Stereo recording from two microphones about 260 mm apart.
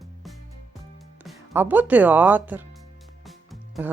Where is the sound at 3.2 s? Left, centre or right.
Centre.